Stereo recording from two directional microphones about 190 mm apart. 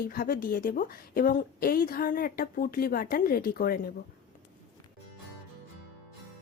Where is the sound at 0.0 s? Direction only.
50° left (ahead or behind).